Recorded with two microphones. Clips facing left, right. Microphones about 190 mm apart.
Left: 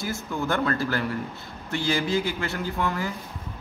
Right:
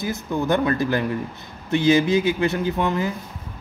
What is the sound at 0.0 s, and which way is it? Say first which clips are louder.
Speech: right 5 dB; 20° right (ahead or behind).